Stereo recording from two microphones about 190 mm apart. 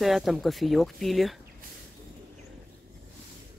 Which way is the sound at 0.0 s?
Centre (ahead or behind).